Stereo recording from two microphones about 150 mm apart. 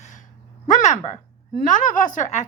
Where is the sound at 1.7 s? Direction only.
60° left (ahead or behind).